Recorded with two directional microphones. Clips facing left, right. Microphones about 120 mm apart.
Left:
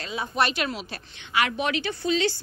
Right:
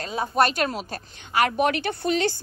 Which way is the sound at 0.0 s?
45° right (ahead or behind).